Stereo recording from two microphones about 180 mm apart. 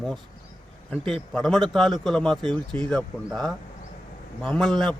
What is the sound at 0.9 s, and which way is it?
Speech, centre (ahead or behind).